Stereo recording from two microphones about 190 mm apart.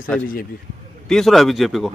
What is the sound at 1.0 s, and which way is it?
Speech, centre (ahead or behind).